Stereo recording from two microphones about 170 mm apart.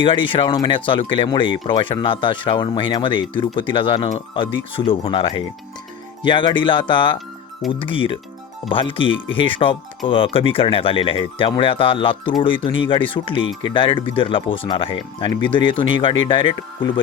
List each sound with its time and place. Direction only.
0.0 s speech: 30° left (ahead or behind)